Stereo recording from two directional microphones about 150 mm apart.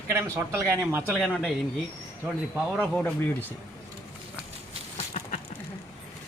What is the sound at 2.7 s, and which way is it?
Speech, 5° left (ahead or behind).